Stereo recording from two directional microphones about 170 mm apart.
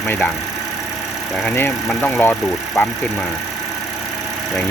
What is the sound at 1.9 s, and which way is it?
Speech, 10° left (ahead or behind).